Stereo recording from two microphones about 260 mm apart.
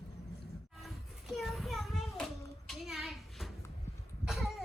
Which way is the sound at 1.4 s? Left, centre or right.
Centre.